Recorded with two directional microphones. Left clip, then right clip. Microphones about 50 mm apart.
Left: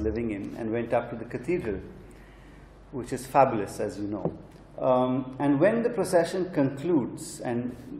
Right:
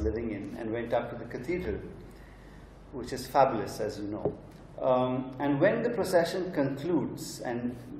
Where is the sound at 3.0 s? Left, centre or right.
Centre.